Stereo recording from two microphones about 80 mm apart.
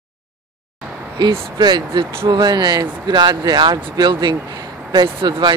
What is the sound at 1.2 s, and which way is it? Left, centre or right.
Speech, right.